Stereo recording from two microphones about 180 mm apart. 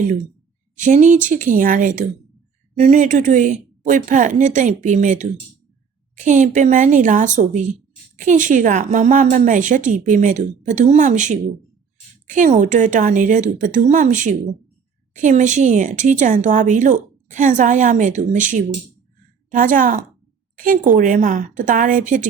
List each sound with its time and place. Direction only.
0.8 s speech: 45° right (ahead or behind)